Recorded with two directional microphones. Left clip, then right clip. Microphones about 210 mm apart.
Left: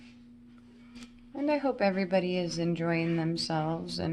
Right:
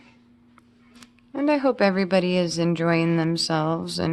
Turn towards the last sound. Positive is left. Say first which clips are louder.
# right 8 dB
turn(degrees=-45)  # may be behind; listen again after turning